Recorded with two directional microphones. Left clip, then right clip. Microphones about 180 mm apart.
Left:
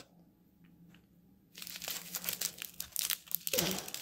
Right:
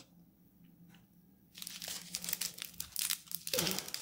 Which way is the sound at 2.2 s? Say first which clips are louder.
Even; 30° left (ahead or behind).